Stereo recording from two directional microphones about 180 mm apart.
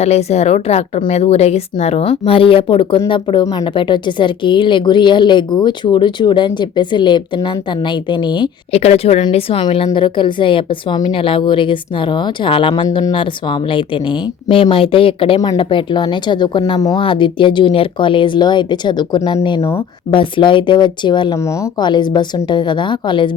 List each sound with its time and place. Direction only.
0.0 s a woman's voice: 35° left (ahead or behind)